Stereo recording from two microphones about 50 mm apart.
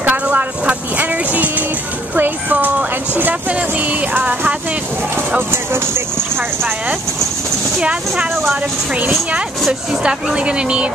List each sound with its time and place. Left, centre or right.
0.0 s a sound: right
2.1 s speech: right
5.5 s speech: right
7.8 s speech: right
9.7 s speech: right